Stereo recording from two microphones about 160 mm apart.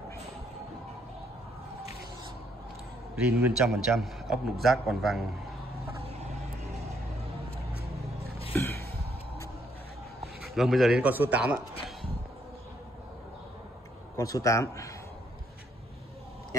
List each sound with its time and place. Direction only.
3.2 s a man's voice: 5° right (ahead or behind)
8.5 s a sound: 15° left (ahead or behind)
10.5 s speech: centre (ahead or behind)
14.1 s speech: 20° left (ahead or behind)